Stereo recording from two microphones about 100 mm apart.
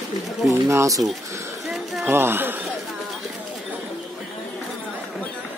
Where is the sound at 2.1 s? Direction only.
20° right (ahead or behind).